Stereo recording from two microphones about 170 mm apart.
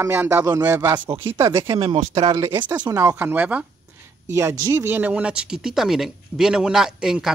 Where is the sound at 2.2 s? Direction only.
20° right (ahead or behind).